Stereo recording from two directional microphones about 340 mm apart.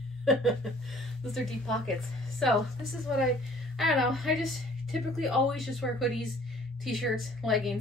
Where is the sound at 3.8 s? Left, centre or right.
Centre.